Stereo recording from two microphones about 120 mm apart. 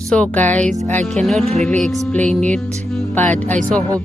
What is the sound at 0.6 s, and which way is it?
Speech, 90° right.